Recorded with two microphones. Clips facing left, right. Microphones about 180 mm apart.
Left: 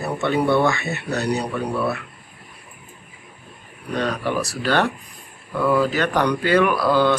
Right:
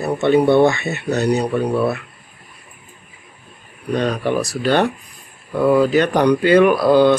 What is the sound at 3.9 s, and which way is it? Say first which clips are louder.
Speech: right 4 dB; 20° right (ahead or behind).